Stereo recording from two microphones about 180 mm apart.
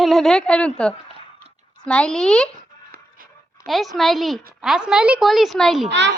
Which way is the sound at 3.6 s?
Centre (ahead or behind).